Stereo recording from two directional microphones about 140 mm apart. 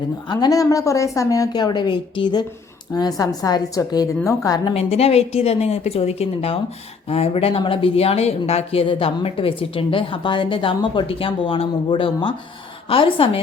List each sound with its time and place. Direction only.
0.3 s a woman's voice: 30° left (ahead or behind)
4.7 s a woman's voice: 45° left (ahead or behind)